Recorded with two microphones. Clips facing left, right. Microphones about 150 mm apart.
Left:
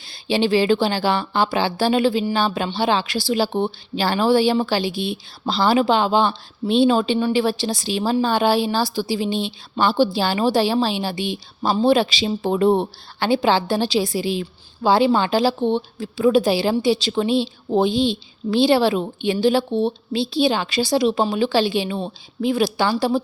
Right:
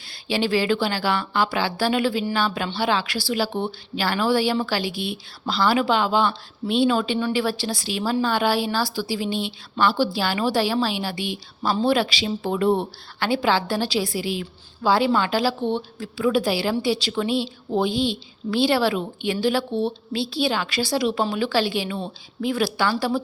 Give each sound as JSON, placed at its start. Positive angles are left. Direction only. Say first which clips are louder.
{"t": 0.1, "sound": "a woman's voice", "louder": "left 4 dB", "side_deg": 25}